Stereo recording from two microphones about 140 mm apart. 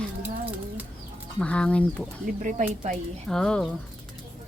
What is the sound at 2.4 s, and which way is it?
Speech, 65° right (ahead or behind).